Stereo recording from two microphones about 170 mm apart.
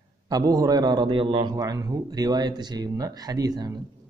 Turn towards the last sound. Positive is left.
turn(degrees=-25)  # may be behind; listen again after turning